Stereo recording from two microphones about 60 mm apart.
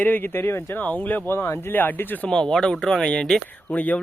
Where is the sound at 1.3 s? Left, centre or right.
Left.